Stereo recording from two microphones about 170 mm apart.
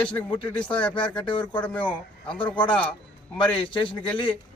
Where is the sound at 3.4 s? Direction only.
30° left (ahead or behind).